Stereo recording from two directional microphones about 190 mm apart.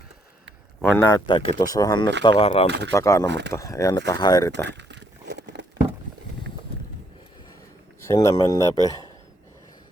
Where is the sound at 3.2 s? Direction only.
65° right (ahead or behind).